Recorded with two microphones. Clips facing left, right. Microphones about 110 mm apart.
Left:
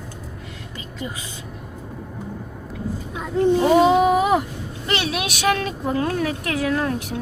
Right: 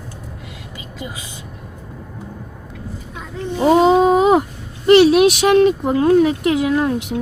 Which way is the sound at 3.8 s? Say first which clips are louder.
Right 4 dB; 25° right (ahead or behind).